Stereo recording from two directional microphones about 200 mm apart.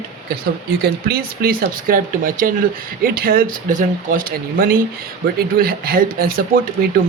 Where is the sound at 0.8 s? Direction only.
50° right (ahead or behind).